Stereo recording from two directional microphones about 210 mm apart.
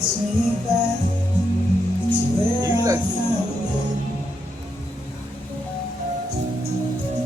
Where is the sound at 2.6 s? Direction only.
15° right (ahead or behind).